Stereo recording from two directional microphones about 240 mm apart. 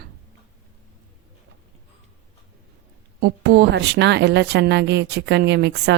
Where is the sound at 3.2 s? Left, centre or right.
Right.